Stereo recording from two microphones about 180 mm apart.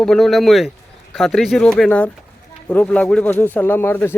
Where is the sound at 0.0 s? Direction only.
Centre (ahead or behind).